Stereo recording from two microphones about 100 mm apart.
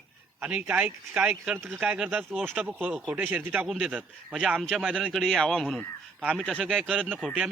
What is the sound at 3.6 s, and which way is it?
A man's voice, 5° right (ahead or behind).